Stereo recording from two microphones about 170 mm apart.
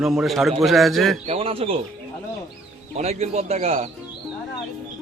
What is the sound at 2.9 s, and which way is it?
Speech, 40° right (ahead or behind).